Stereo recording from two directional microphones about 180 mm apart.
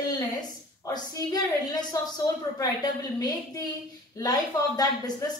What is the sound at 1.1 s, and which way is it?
Speech, 20° left (ahead or behind).